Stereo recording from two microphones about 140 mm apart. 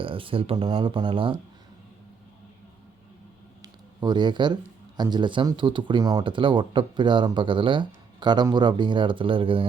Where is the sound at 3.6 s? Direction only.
30° right (ahead or behind).